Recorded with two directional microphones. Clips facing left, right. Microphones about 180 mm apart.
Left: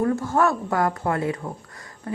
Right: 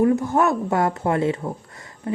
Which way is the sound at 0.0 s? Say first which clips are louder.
Right 3 dB; 20° right (ahead or behind).